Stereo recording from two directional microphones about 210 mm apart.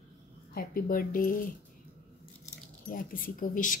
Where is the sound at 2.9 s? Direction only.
40° left (ahead or behind).